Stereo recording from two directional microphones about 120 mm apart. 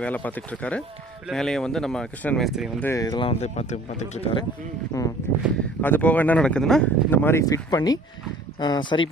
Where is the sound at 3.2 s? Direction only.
65° left (ahead or behind).